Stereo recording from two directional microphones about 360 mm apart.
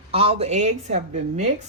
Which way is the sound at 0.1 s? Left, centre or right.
Centre.